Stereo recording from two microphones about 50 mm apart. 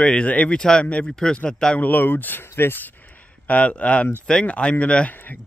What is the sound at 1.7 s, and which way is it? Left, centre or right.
Speech, left.